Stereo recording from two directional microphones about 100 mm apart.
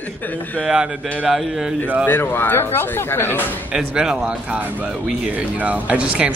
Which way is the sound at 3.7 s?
5° right (ahead or behind).